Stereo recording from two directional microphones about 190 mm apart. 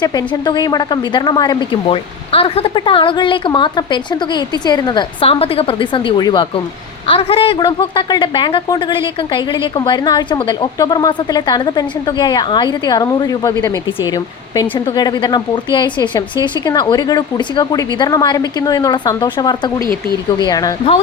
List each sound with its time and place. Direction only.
0.0 s a woman's voice: 20° left (ahead or behind)